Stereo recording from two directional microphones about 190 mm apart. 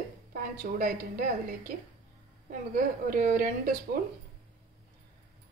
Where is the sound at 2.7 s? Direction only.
45° right (ahead or behind).